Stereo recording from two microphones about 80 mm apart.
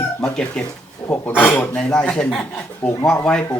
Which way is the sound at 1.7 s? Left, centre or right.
Centre.